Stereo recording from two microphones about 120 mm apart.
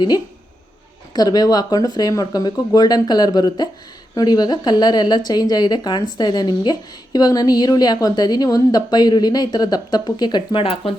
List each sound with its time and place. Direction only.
1.1 s a woman's voice: 30° left (ahead or behind); by 10.9 s 50° left (ahead or behind)